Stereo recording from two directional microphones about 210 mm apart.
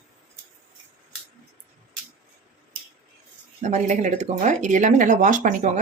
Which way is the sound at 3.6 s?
35° right (ahead or behind).